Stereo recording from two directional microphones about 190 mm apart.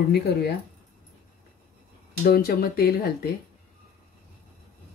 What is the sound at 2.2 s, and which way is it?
Speech, 55° left (ahead or behind).